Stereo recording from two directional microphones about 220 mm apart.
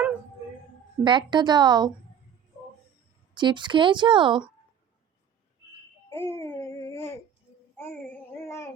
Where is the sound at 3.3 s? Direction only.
20° right (ahead or behind).